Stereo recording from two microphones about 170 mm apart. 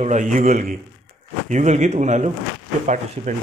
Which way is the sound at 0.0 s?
45° right (ahead or behind).